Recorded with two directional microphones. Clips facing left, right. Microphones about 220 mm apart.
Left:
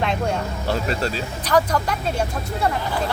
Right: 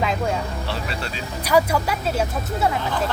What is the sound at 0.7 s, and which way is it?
Speech, 40° left (ahead or behind).